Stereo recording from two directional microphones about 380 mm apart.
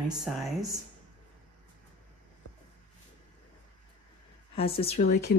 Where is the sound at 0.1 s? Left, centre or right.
Centre.